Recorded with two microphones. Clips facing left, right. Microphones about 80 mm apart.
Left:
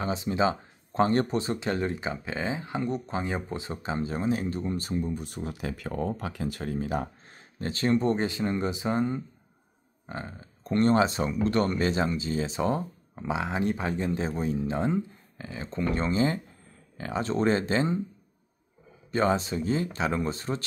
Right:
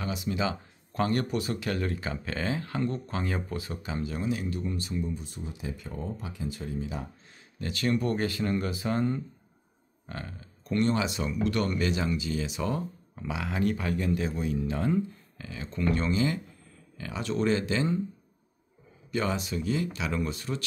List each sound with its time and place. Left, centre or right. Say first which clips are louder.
0.0 s speech: left 4 dB; left
7.5 s speech: left 3 dB; left
19.1 s speech: left 5 dB; left